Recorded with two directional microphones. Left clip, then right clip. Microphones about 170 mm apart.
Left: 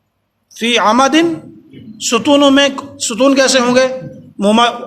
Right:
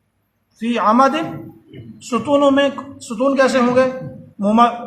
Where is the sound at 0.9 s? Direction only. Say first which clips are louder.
Left 2 dB; 40° left (ahead or behind).